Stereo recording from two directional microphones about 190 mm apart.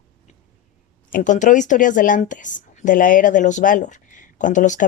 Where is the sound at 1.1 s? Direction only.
45° left (ahead or behind).